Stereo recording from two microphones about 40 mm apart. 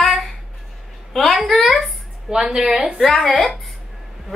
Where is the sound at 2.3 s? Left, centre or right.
Centre.